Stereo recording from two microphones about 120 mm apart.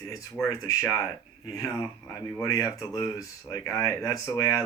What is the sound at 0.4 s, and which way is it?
Speech, 25° left (ahead or behind).